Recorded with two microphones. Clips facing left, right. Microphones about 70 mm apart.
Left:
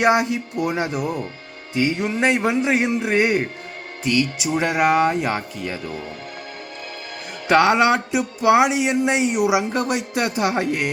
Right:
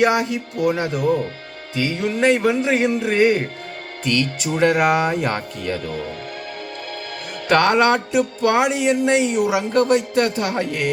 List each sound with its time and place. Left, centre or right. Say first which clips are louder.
0.0 s a man's voice: even; left
7.4 s speech: even; centre